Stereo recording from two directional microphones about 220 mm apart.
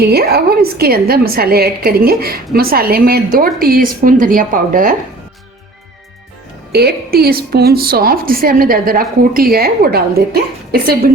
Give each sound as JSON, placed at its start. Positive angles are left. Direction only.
{"t": 0.0, "sound": "a woman's voice", "side_deg": -45}
{"t": 6.7, "sound": "a woman's voice", "side_deg": -45}